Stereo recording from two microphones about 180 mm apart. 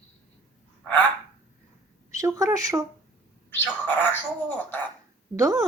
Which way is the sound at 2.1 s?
15° right (ahead or behind).